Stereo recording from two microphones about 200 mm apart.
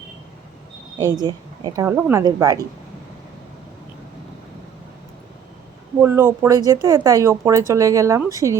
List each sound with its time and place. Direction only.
1.2 s a woman's voice: 20° right (ahead or behind)
6.0 s a woman's voice: 10° right (ahead or behind)